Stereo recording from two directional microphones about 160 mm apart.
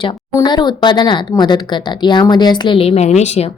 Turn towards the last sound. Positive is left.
turn(degrees=45)  # may be behind; listen again after turning